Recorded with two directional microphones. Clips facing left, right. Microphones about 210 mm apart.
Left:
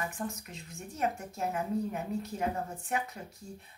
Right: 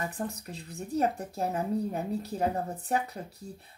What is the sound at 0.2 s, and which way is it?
Speech, 35° right (ahead or behind).